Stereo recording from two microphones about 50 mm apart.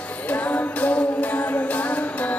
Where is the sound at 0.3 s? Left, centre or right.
Left.